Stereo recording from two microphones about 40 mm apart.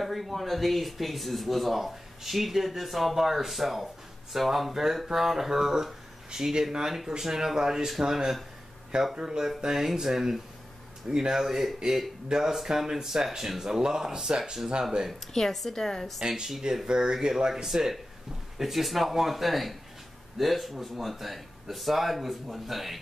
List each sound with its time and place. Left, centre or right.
0.0 s speech: centre
15.3 s a woman's voice: centre
16.2 s speech: centre
16.8 s speech: centre